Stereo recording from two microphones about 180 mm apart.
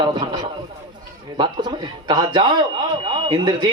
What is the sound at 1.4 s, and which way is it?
Speech, 25° right (ahead or behind).